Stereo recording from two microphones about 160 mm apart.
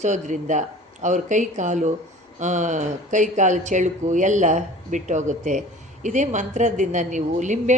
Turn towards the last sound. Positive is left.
turn(degrees=-50)  # may be behind; listen again after turning